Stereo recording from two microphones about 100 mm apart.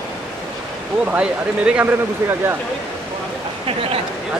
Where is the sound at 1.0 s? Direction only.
15° right (ahead or behind).